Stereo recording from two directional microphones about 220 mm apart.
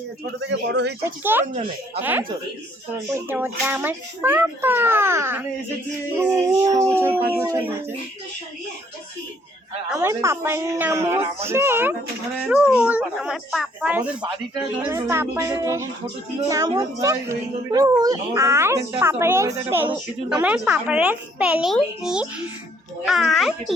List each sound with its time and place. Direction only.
0.3 s speech: 55° right (ahead or behind)
1.0 s speech: 10° right (ahead or behind)
10.0 s speech: 15° right (ahead or behind)